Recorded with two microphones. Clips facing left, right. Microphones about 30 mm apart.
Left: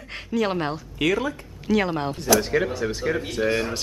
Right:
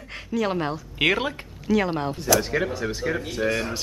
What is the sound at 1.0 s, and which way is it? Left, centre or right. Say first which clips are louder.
Speech: right 1 dB; right.